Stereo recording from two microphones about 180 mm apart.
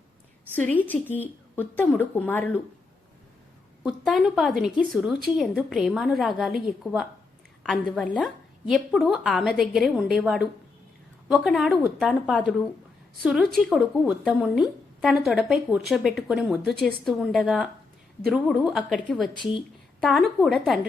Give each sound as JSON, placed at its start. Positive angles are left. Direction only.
{"t": 0.7, "sound": "a woman's voice", "side_deg": 10}
{"t": 3.8, "sound": "a woman's voice", "side_deg": 0}
{"t": 19.3, "sound": "speech", "side_deg": 25}
{"t": 20.0, "sound": "a woman's voice", "side_deg": 0}